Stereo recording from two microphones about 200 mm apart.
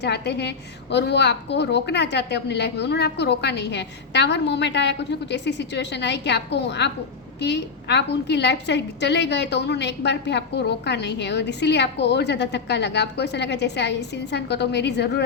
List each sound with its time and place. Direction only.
0.0 s a woman's voice: 55° left (ahead or behind)